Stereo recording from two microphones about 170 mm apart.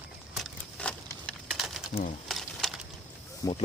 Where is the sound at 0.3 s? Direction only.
Centre (ahead or behind).